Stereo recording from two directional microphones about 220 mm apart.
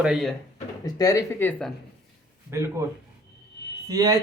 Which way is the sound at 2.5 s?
15° right (ahead or behind).